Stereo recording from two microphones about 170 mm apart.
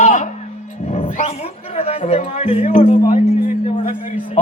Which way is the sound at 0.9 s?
40° left (ahead or behind).